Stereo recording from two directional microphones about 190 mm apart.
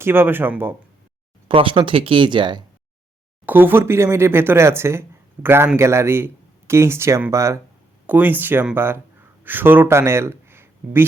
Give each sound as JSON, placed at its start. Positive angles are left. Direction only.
{"t": 0.0, "sound": "speech", "side_deg": -10}
{"t": 1.5, "sound": "speech", "side_deg": -25}
{"t": 3.4, "sound": "speech", "side_deg": -10}